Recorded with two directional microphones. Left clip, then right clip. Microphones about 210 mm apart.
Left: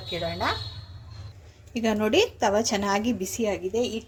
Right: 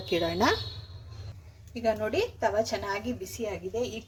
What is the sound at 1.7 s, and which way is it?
A woman's voice, 35° left (ahead or behind).